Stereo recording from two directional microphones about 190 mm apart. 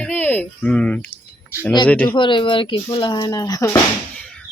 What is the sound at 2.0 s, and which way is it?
A man's voice, 25° left (ahead or behind).